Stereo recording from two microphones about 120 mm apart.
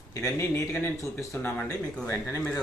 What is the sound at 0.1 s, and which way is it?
Speech, 25° left (ahead or behind).